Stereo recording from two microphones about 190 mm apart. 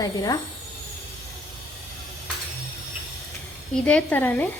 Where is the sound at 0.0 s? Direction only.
20° left (ahead or behind).